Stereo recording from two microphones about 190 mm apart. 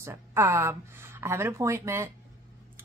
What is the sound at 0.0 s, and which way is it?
A woman's voice, 15° right (ahead or behind).